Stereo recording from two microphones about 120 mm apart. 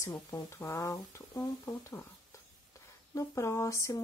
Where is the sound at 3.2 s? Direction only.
25° left (ahead or behind).